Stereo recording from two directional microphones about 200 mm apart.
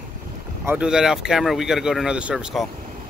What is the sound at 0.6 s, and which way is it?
Speech, 5° right (ahead or behind).